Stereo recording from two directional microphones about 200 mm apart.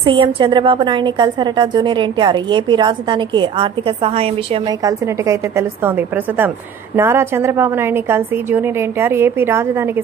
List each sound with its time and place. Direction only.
0.0 s a woman's voice: 25° right (ahead or behind)
4.8 s a woman's voice: 15° right (ahead or behind)